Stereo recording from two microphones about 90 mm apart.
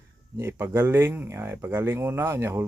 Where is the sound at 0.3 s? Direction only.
30° right (ahead or behind).